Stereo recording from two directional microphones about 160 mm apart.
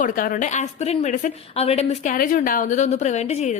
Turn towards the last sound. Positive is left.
turn(degrees=45)  # may be behind; listen again after turning